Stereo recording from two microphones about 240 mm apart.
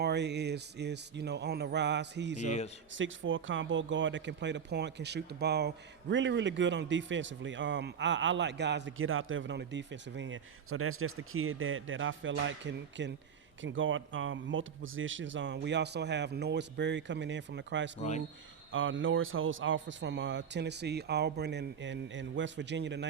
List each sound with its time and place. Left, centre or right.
0.0 s speech: right
2.4 s a man's voice: left
2.9 s speech: right